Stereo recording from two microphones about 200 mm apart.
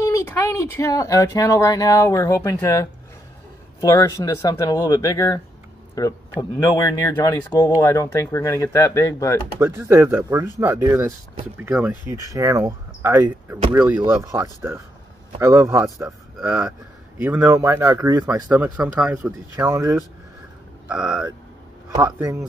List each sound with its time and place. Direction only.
0.0 s speech: 15° left (ahead or behind)
6.6 s speech: 15° left (ahead or behind)
9.6 s speech: 15° right (ahead or behind)
19.5 s speech: 15° right (ahead or behind)
20.9 s speech: 5° right (ahead or behind)
21.9 s speech: 15° right (ahead or behind)